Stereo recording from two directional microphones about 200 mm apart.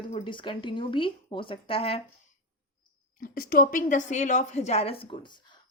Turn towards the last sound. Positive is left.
turn(degrees=25)  # may be behind; listen again after turning